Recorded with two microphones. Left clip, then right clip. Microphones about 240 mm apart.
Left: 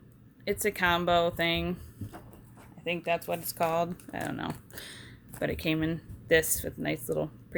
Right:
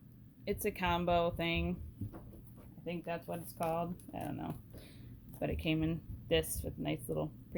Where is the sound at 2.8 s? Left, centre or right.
Left.